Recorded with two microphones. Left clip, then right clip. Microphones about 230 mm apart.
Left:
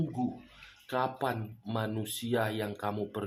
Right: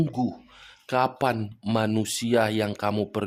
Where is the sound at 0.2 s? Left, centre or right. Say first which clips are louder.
Right 6 dB; right.